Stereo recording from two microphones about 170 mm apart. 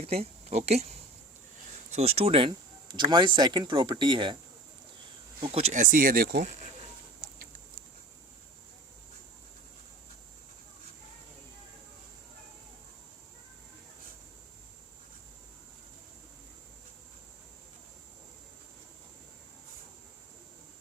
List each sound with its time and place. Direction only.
0.0 s speech: 35° right (ahead or behind)
2.0 s speech: 35° right (ahead or behind)
5.4 s speech: 35° right (ahead or behind); by 6.7 s 55° right (ahead or behind)